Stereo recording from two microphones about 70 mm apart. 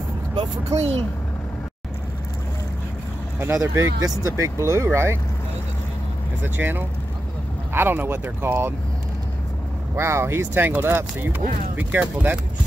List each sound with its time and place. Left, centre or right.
0.7 s speech: right
3.3 s speech: right
6.4 s speech: right
9.9 s speech: right